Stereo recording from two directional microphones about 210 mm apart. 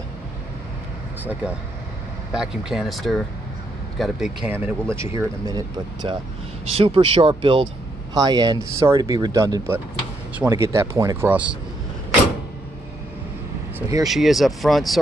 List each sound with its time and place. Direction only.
2.3 s speech: 5° right (ahead or behind)
6.7 s speech: 25° right (ahead or behind); by 11.5 s 5° right (ahead or behind)
13.7 s speech: 15° right (ahead or behind)
14.0 s speech: centre (ahead or behind)